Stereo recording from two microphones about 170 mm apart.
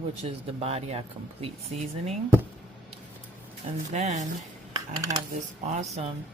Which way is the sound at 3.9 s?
45° right (ahead or behind).